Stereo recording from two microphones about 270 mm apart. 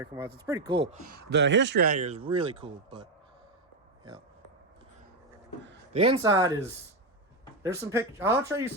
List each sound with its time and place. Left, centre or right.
0.3 s speech: centre
1.1 s speech: right; by 3.1 s centre
5.9 s speech: right
7.6 s speech: centre